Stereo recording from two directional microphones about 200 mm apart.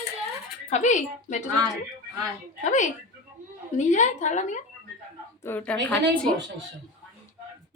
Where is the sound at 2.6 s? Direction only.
40° left (ahead or behind).